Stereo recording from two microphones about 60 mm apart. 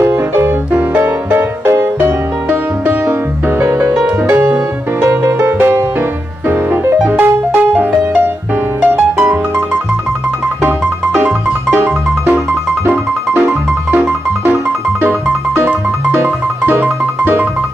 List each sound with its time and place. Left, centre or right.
0.0 s music: right
3.5 s music: right
7.2 s music: right
11.1 s music: right